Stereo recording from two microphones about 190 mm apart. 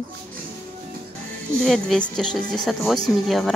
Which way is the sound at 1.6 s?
5° left (ahead or behind).